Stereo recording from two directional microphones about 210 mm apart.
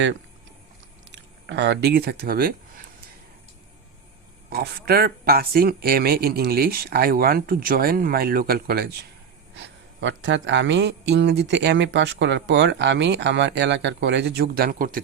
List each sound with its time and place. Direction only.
1.1 s speech: 55° right (ahead or behind)
4.4 s speech: 45° right (ahead or behind)
9.6 s speech: 60° right (ahead or behind); by 15.0 s 45° right (ahead or behind)